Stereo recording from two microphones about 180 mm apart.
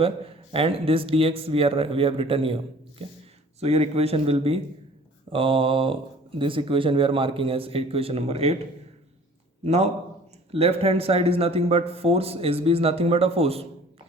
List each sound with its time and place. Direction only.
0.0 s speech: 30° right (ahead or behind)
3.6 s speech: 35° right (ahead or behind)
5.3 s mantra: 30° right (ahead or behind)
6.4 s speech: 30° right (ahead or behind)
9.6 s speech: 40° right (ahead or behind)